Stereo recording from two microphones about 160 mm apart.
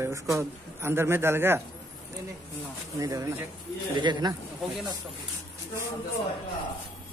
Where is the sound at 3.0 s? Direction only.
20° right (ahead or behind).